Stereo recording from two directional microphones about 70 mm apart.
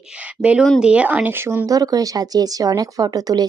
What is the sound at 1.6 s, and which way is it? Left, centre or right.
Speech, right.